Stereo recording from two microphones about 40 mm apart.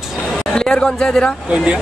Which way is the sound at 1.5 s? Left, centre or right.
Right.